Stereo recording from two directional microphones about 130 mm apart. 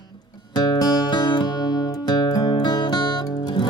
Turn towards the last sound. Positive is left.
turn(degrees=35)  # may be behind; listen again after turning